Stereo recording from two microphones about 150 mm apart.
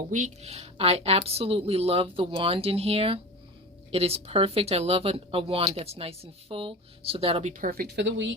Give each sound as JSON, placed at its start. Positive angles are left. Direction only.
{"t": 0.1, "sound": "speech", "side_deg": -50}
{"t": 7.5, "sound": "speech", "side_deg": -75}